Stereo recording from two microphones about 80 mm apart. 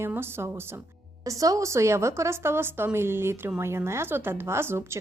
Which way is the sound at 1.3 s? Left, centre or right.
Right.